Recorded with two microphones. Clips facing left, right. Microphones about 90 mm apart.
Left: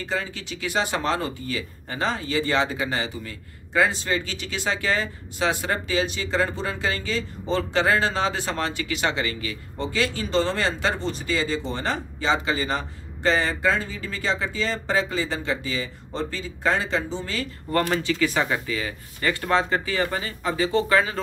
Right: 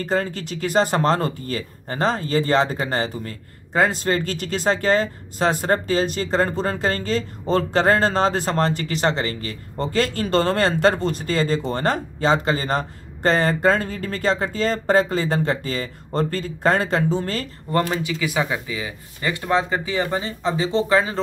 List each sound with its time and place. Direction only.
0.0 s speech: 45° right (ahead or behind)
17.6 s speech: 20° right (ahead or behind)